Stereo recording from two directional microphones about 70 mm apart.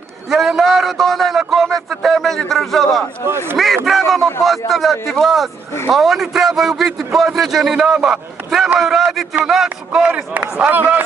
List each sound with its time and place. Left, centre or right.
0.3 s a sound: centre
3.5 s a man's voice: centre
10.0 s speech: centre